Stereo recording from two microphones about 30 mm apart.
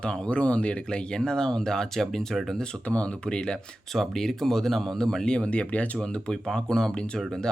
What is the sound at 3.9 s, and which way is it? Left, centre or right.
Speech, centre.